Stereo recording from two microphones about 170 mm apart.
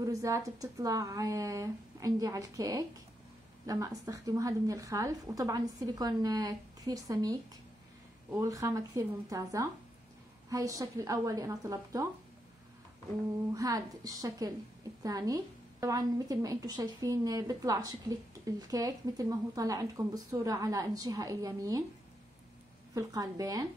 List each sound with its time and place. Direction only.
0.0 s a woman's voice: 20° right (ahead or behind)
13.5 s a woman's voice: 20° right (ahead or behind)
22.9 s a woman's voice: 20° right (ahead or behind)